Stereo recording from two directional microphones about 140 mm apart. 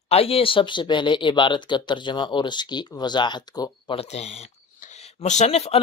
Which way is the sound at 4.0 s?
50° left (ahead or behind).